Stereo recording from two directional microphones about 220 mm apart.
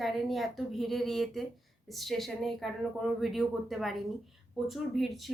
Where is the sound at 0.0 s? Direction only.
Centre (ahead or behind).